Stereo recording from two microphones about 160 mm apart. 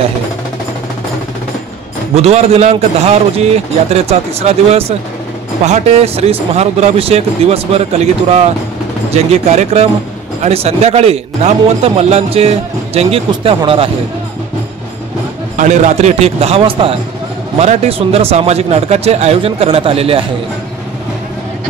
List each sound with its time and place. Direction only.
2.1 s a man's voice: 40° right (ahead or behind)
15.5 s a man's voice: 50° right (ahead or behind)